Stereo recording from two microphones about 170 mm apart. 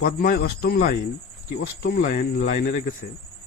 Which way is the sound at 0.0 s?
60° left (ahead or behind).